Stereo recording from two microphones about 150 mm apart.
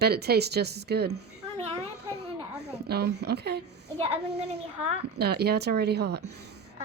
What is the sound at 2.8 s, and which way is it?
A woman's voice, 90° right.